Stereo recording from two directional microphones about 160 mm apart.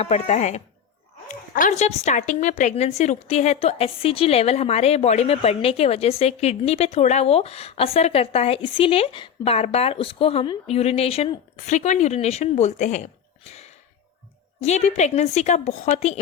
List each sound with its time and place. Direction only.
0.0 s a woman's voice: 45° left (ahead or behind)
13.5 s a sound: 40° left (ahead or behind)
14.6 s a woman's voice: 45° left (ahead or behind)